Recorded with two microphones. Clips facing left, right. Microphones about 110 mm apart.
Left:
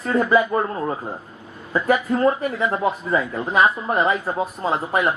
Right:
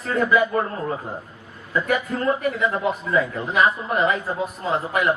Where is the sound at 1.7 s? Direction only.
30° left (ahead or behind).